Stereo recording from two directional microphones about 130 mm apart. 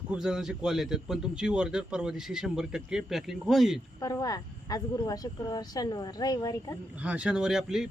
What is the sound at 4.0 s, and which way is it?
Speech, 25° left (ahead or behind).